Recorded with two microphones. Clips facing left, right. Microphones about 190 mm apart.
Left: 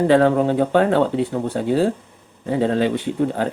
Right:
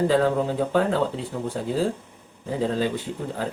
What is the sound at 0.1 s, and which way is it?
Speech, 70° left (ahead or behind).